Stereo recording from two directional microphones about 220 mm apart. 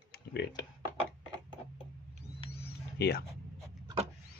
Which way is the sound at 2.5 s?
45° left (ahead or behind).